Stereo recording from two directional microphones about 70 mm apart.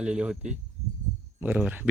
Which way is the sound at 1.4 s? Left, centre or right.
Right.